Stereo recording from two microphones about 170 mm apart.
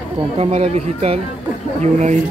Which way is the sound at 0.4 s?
35° right (ahead or behind).